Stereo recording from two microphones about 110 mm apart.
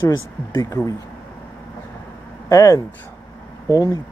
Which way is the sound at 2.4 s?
30° left (ahead or behind).